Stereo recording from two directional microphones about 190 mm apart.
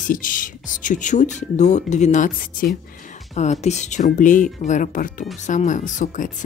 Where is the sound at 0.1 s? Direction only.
45° left (ahead or behind).